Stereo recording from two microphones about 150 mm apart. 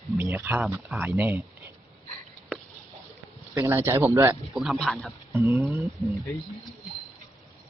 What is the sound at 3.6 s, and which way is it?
Speech, 20° right (ahead or behind).